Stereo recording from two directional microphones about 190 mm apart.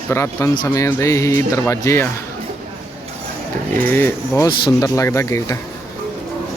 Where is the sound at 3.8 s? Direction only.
10° left (ahead or behind).